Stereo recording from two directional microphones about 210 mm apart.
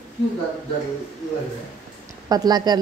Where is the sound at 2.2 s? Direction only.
20° right (ahead or behind).